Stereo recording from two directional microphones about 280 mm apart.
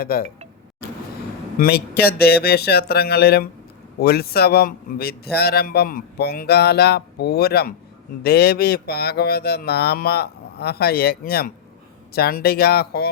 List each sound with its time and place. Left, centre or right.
0.0 s a man's voice: left
1.5 s a man's voice: left